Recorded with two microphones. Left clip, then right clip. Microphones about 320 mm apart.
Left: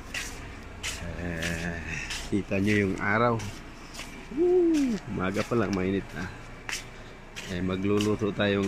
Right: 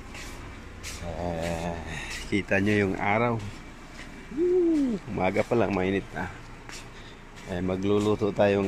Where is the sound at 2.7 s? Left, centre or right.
Centre.